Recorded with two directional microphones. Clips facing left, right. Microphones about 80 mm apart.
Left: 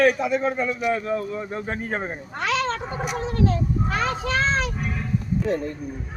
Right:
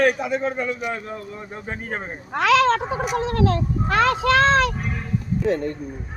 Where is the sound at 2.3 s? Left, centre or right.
Right.